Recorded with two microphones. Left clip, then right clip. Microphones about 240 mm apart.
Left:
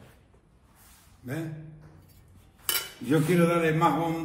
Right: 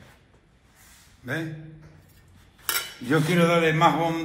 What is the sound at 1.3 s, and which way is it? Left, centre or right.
Speech, centre.